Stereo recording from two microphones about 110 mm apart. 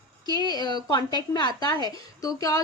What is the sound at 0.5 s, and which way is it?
Speech, 40° left (ahead or behind).